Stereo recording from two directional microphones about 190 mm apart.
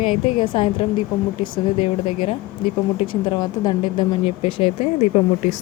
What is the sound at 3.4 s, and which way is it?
Speech, 20° left (ahead or behind).